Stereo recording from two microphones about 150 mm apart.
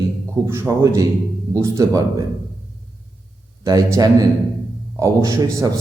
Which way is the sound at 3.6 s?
20° right (ahead or behind).